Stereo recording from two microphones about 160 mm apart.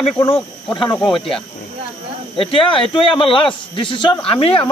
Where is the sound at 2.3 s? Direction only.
35° left (ahead or behind).